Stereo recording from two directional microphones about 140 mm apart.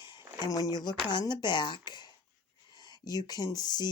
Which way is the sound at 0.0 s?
30° left (ahead or behind).